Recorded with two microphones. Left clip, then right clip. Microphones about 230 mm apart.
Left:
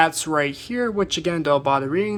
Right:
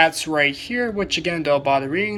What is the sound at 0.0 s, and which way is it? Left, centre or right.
Speech, left.